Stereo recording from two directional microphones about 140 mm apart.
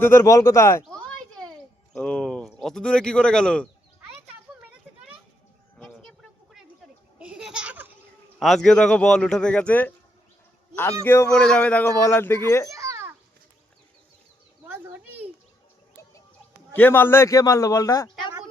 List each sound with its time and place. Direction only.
0.0 s a man's voice: 20° left (ahead or behind)
0.9 s a sound: 5° left (ahead or behind)
1.9 s speech: 5° left (ahead or behind)
7.2 s a sound: 5° right (ahead or behind)
8.4 s speech: centre (ahead or behind)
11.0 s speech: 15° left (ahead or behind)
11.3 s speech: 5° left (ahead or behind)
12.7 s a sound: 20° right (ahead or behind)
16.7 s a man's voice: 15° left (ahead or behind)